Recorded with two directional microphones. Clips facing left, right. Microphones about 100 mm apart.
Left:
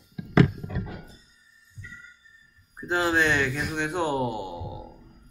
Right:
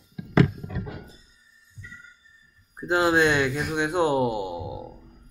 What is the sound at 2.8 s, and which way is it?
Speech, 15° right (ahead or behind).